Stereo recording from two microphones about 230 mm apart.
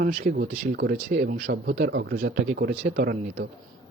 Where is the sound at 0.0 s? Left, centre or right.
Right.